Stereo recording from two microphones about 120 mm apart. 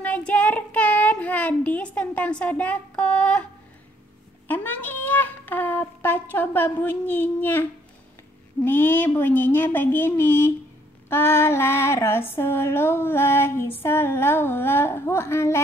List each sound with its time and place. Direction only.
0.0 s child singing: 10° left (ahead or behind)
4.5 s speech: 15° left (ahead or behind)
8.6 s speech: 15° left (ahead or behind)
11.1 s female singing: 20° left (ahead or behind)